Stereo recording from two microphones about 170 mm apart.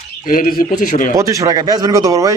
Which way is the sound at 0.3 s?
55° left (ahead or behind).